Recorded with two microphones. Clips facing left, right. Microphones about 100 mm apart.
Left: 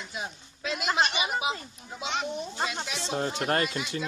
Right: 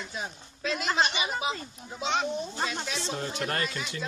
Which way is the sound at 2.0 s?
35° right (ahead or behind).